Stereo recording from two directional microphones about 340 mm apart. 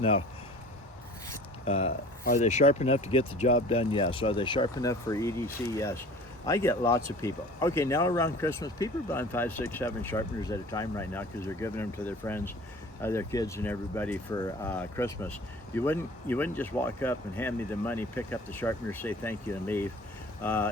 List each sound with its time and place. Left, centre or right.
1.3 s speech: centre